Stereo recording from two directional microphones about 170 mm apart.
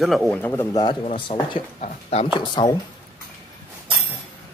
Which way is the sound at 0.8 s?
30° left (ahead or behind).